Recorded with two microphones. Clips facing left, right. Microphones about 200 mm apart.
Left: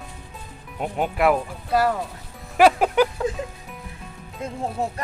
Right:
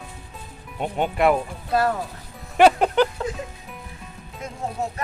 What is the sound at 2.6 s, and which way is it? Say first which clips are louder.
Music: even; 5° left (ahead or behind).